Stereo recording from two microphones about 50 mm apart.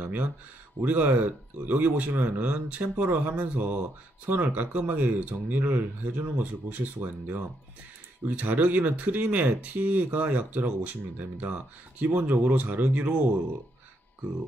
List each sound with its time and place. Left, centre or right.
0.0 s speech: right